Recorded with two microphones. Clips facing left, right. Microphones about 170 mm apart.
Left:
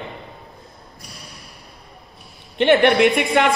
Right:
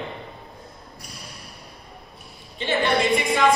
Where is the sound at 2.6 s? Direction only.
70° left (ahead or behind).